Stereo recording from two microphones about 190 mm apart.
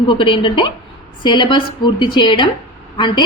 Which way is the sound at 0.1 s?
25° left (ahead or behind).